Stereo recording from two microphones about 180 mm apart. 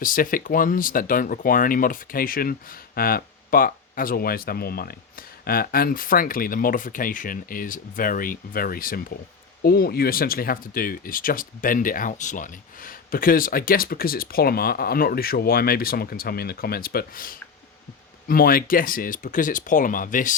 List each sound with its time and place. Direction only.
0.0 s speech: 50° left (ahead or behind)